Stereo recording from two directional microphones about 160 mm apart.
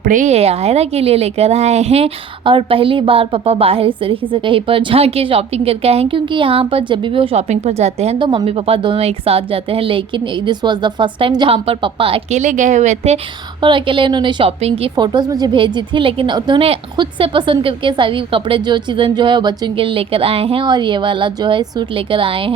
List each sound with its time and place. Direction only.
0.0 s a woman's voice: 55° right (ahead or behind)
8.2 s a woman's voice: 30° right (ahead or behind); by 13.1 s 45° right (ahead or behind)
13.6 s a woman's voice: 30° right (ahead or behind)